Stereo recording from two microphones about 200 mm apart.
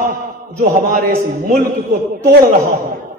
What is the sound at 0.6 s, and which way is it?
A man's voice, 45° right (ahead or behind).